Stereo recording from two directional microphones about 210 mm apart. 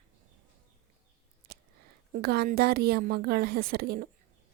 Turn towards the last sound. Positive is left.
turn(degrees=-45)  # may be behind; listen again after turning